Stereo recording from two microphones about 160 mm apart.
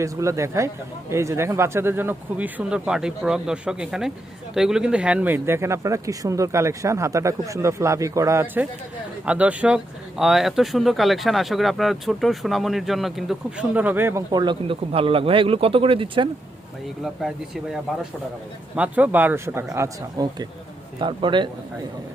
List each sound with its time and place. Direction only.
0.0 s speech: 20° right (ahead or behind)
14.3 s speech: 30° right (ahead or behind)
17.0 s speech: centre (ahead or behind)
18.8 s speech: 10° right (ahead or behind)
21.0 s speech: 30° right (ahead or behind)